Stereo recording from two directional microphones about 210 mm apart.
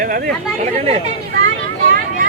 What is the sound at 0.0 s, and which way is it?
Chatter, 45° right (ahead or behind).